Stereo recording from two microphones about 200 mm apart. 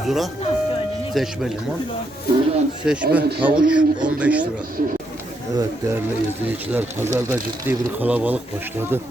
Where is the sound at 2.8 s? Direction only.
5° right (ahead or behind).